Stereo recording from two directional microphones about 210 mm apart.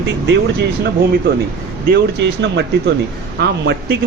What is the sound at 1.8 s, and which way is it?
Speech, 50° right (ahead or behind).